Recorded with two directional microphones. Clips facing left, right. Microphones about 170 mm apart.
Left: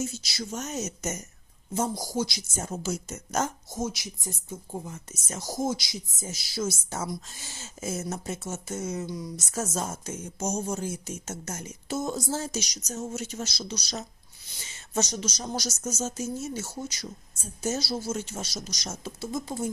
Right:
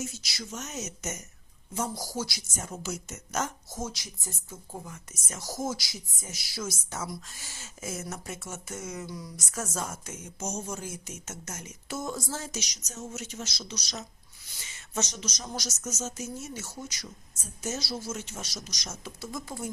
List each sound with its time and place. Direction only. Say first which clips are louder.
0.0 s speech: left 5 dB; 30° left (ahead or behind)
2.0 s a woman's voice: left 5 dB; 20° left (ahead or behind)
2.6 s speech: left 5 dB; 30° left (ahead or behind)
3.8 s a woman's voice: left 5 dB; 10° left (ahead or behind)